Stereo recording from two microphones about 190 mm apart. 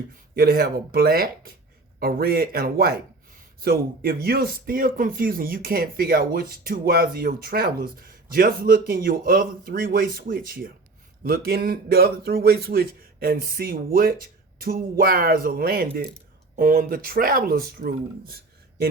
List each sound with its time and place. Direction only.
0.3 s speech: 50° right (ahead or behind)